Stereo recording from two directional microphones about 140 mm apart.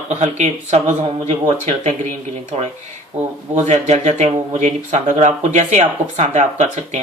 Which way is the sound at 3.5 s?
55° right (ahead or behind).